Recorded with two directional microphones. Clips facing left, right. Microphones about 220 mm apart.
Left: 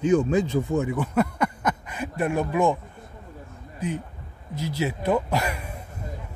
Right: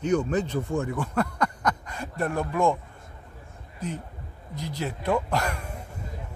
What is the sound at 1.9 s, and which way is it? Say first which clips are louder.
Speech: left 3 dB; 15° left (ahead or behind).